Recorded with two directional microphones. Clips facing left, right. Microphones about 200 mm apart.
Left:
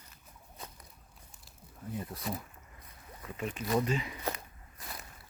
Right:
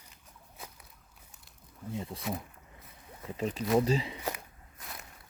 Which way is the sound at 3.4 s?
35° right (ahead or behind).